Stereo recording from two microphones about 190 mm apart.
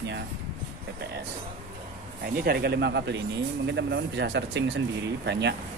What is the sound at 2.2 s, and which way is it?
Speech, 55° right (ahead or behind).